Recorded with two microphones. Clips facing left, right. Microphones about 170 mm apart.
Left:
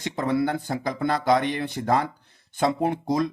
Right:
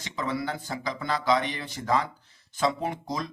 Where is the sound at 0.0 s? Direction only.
55° left (ahead or behind).